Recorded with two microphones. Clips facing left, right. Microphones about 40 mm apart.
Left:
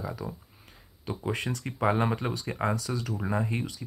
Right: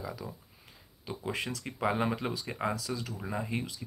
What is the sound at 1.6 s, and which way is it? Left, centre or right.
Speech, centre.